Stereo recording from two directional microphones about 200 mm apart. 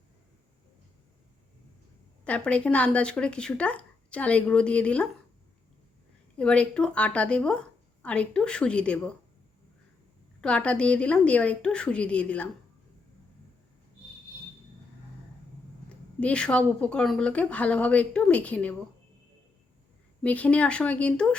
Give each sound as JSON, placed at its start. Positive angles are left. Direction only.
{"t": 2.2, "sound": "speech", "side_deg": 5}
{"t": 6.3, "sound": "speech", "side_deg": 5}
{"t": 10.4, "sound": "speech", "side_deg": 5}
{"t": 15.9, "sound": "speech", "side_deg": 5}
{"t": 20.2, "sound": "speech", "side_deg": 5}